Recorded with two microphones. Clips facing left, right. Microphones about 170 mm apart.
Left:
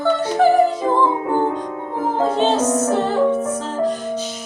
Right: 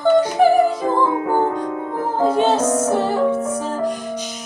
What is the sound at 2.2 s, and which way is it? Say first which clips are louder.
Music: right 1 dB; 10° right (ahead or behind).